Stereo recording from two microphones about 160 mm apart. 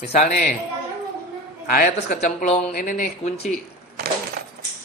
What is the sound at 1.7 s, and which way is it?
Speech, 65° left (ahead or behind).